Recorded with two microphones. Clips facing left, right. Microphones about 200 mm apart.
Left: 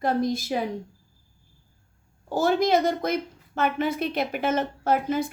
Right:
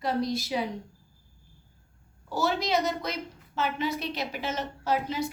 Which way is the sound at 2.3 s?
50° left (ahead or behind).